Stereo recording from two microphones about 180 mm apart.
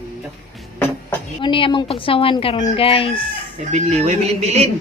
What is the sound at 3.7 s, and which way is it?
Speech, 40° right (ahead or behind).